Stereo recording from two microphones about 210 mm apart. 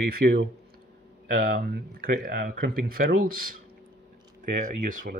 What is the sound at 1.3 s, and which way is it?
Speech, 45° right (ahead or behind).